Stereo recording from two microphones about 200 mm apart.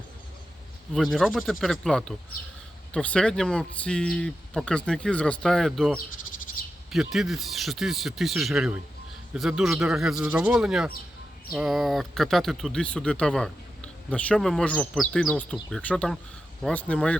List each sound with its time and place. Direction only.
0.9 s speech: centre (ahead or behind)